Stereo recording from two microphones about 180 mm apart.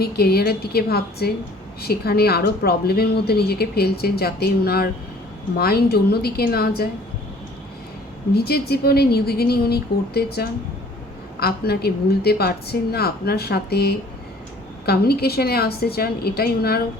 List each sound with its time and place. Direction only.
0.0 s a woman's voice: 60° left (ahead or behind)
8.3 s a woman's voice: 60° left (ahead or behind)